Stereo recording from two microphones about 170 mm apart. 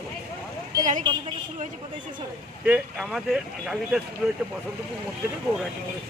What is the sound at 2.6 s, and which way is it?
Speech, 5° right (ahead or behind).